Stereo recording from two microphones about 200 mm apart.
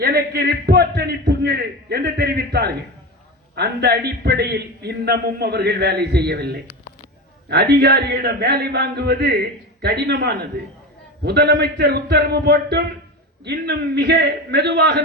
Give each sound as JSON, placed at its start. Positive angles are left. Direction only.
{"t": 0.0, "sound": "a man's voice", "side_deg": -55}